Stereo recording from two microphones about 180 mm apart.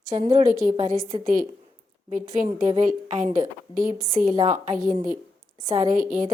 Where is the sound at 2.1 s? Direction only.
45° right (ahead or behind).